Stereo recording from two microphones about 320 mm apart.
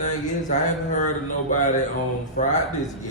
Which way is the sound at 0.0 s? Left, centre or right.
Left.